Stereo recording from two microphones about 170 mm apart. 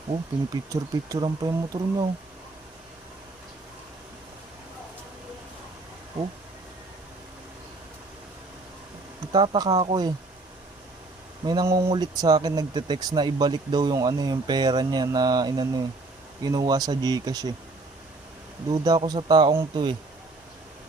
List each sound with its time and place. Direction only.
0.5 s speech: 20° right (ahead or behind)
9.3 s speech: 30° right (ahead or behind)
9.7 s speech: 35° right (ahead or behind)
11.4 s speech: 20° right (ahead or behind)
18.7 s speech: 25° right (ahead or behind)